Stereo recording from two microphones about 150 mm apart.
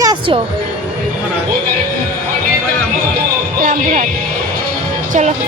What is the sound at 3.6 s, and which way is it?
Speech, 60° right (ahead or behind).